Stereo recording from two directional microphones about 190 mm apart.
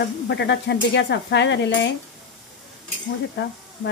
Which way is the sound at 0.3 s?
65° left (ahead or behind).